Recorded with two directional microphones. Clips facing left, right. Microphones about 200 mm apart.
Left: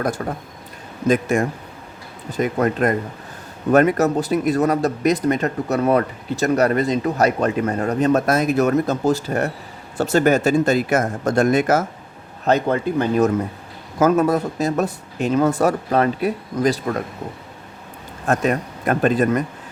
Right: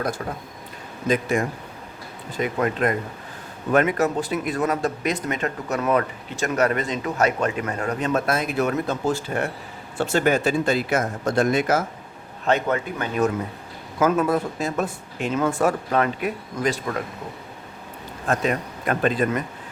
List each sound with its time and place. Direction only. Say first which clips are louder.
1.0 s speech: left 4 dB; 50° left (ahead or behind)
12.5 s speech: left 4 dB; 35° left (ahead or behind)
18.3 s speech: left 4 dB; 45° left (ahead or behind)